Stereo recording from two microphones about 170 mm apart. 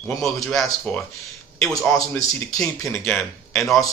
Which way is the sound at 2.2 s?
20° left (ahead or behind).